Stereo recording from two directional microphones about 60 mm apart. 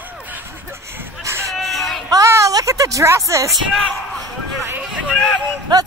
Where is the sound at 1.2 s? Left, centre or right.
Right.